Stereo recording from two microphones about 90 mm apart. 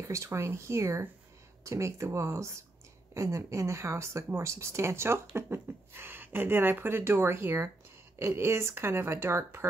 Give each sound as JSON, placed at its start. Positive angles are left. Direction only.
{"t": 0.0, "sound": "speech", "side_deg": -35}